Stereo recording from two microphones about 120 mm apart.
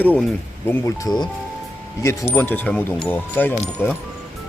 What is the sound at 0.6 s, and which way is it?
Speech, 25° left (ahead or behind).